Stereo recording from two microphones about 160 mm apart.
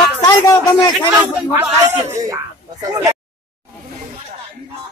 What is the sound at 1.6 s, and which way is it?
A man's voice, 15° right (ahead or behind).